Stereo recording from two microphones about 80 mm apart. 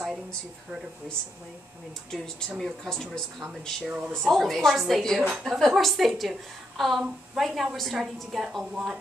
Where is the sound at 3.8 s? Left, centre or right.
Centre.